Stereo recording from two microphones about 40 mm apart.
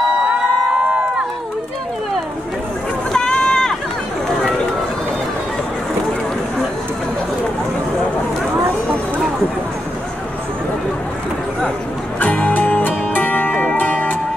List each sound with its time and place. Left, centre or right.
0.3 s crowd: right
3.1 s run: left
12.2 s music: left